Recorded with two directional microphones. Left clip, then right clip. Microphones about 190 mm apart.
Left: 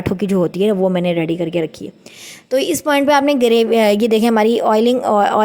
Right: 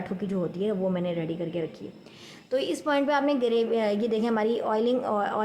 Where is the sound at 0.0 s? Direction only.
50° left (ahead or behind).